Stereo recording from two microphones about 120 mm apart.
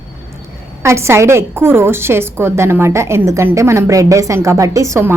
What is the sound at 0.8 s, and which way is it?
A woman's voice, 20° right (ahead or behind).